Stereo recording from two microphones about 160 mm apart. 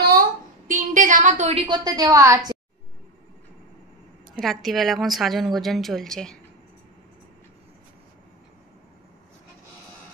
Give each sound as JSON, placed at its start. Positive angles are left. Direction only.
{"t": 0.7, "sound": "a sound", "side_deg": -55}
{"t": 1.9, "sound": "a woman's voice", "side_deg": -20}
{"t": 4.3, "sound": "a woman's voice", "side_deg": 0}